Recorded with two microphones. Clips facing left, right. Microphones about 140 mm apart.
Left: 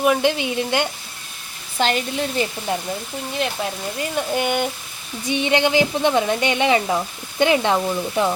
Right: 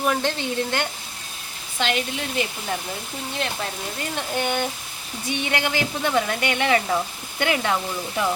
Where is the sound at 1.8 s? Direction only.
40° left (ahead or behind).